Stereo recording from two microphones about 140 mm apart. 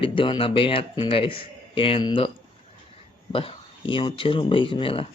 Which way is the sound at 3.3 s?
40° left (ahead or behind).